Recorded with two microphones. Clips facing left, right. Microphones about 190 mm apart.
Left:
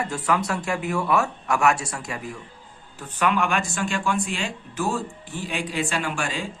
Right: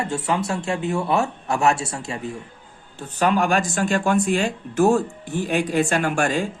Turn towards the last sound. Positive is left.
turn(degrees=-45)  # may be behind; listen again after turning